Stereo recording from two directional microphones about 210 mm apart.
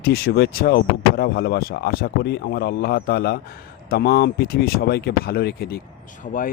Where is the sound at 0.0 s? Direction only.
50° left (ahead or behind).